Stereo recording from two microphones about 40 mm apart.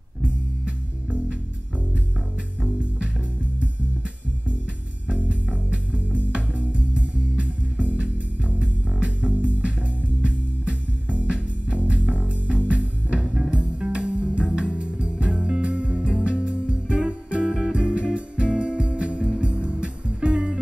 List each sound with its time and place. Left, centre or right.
2.6 s music: right
5.2 s music: right